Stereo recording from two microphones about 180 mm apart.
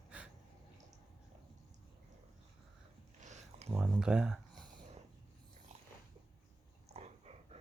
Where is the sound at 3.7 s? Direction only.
5° right (ahead or behind).